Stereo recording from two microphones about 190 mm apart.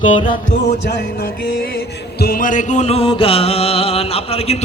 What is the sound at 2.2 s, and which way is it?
Music, 50° left (ahead or behind).